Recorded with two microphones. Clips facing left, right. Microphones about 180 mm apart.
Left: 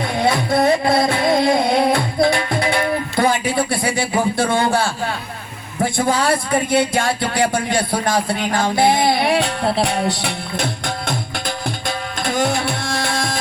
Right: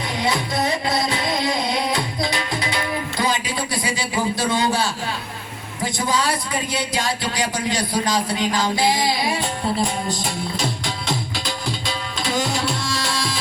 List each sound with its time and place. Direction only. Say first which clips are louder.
0.2 s music: left 6 dB; 55° left (ahead or behind)
3.8 s a man's voice: left 4 dB; 55° left (ahead or behind)